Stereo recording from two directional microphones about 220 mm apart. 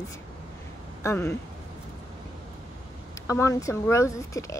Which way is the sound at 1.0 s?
15° left (ahead or behind).